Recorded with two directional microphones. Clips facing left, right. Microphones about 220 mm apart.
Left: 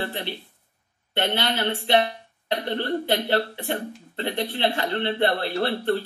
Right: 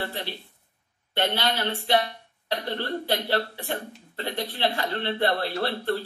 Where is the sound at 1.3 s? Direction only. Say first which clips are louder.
Left 2 dB; 25° left (ahead or behind).